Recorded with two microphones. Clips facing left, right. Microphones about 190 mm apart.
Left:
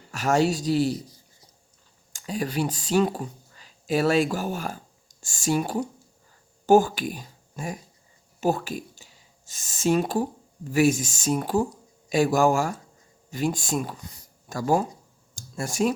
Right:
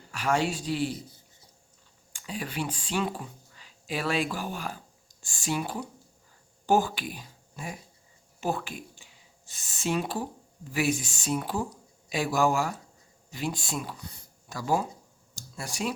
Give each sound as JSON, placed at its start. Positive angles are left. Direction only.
{"t": 0.1, "sound": "a man's voice", "side_deg": 40}
{"t": 2.1, "sound": "speech", "side_deg": 40}